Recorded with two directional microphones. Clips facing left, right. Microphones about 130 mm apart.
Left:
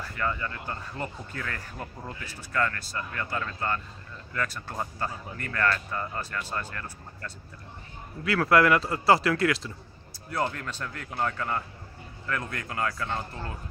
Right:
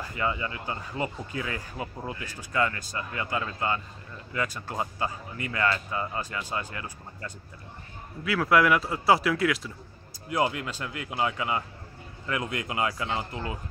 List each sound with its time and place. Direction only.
0.0 s speech: 15° right (ahead or behind)